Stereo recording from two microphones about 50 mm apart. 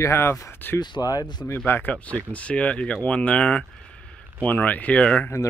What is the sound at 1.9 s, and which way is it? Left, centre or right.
Speech, left.